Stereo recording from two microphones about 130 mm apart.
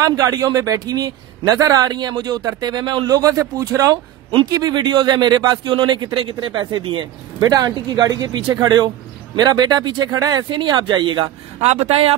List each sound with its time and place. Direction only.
0.0 s a man's voice: 25° right (ahead or behind)
11.6 s speech: 55° right (ahead or behind)